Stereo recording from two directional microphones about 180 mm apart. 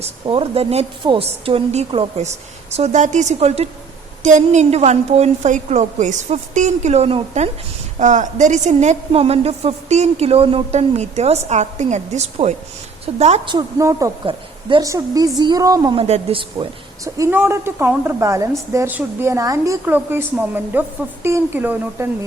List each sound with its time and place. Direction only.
0.0 s a woman's voice: 30° right (ahead or behind)
13.4 s a woman's voice: 25° right (ahead or behind)